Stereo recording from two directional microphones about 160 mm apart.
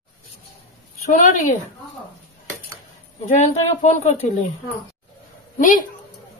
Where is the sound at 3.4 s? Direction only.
45° left (ahead or behind).